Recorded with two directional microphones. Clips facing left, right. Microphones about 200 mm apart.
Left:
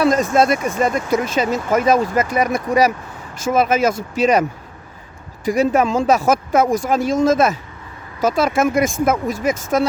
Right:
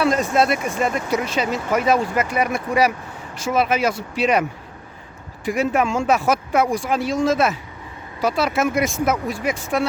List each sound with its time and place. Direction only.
0.0 s speech: 45° left (ahead or behind)
5.5 s speech: 40° left (ahead or behind)